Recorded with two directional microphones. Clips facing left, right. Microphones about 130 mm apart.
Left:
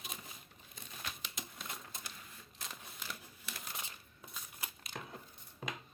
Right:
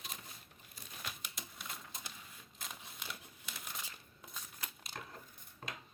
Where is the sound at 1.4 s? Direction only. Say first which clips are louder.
Left 2 dB; centre (ahead or behind).